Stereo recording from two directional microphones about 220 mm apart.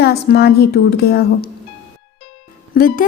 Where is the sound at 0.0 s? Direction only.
45° left (ahead or behind).